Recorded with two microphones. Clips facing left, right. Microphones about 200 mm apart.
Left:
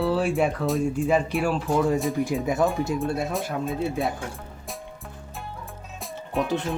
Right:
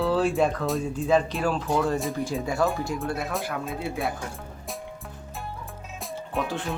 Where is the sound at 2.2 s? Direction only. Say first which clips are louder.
Left 3 dB; 15° left (ahead or behind).